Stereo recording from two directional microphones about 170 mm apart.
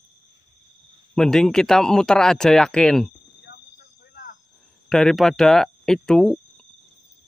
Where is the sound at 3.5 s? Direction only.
70° left (ahead or behind).